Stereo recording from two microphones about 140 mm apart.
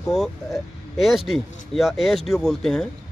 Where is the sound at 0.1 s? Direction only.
Centre (ahead or behind).